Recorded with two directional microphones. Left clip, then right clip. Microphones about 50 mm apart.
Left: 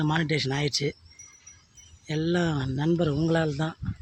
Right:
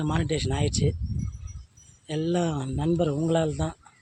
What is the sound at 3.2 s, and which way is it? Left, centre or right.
Speech, centre.